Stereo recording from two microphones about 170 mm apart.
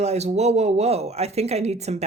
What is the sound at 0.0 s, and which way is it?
Speech, 40° right (ahead or behind).